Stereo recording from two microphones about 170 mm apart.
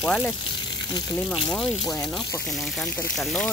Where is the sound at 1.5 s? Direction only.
Centre (ahead or behind).